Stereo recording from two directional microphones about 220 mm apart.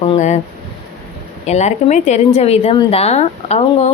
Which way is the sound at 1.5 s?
30° left (ahead or behind).